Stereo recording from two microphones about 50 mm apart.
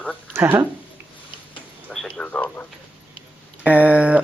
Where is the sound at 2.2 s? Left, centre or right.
Left.